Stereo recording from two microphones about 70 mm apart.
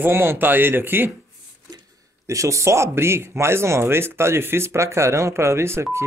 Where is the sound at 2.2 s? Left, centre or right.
Right.